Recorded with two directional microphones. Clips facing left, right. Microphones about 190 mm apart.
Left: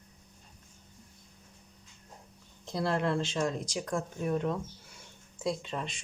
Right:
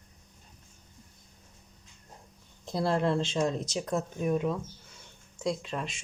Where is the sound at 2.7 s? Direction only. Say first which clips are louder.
Right 3 dB; 30° right (ahead or behind).